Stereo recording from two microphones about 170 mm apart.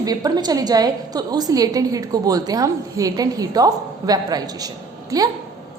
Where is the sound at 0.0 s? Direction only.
20° right (ahead or behind).